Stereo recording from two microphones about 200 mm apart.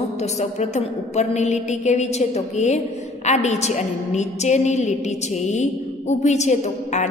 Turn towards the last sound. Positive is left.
turn(degrees=35)  # may be behind; listen again after turning